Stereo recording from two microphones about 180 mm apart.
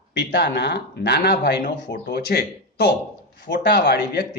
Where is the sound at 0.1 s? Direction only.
75° left (ahead or behind).